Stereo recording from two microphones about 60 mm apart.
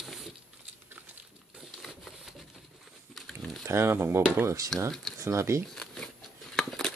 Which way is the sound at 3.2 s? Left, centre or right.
Centre.